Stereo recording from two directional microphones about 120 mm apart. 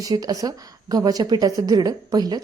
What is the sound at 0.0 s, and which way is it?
A woman's voice, 30° right (ahead or behind).